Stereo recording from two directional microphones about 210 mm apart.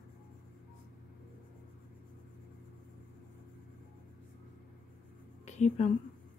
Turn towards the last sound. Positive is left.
turn(degrees=35)  # may be behind; listen again after turning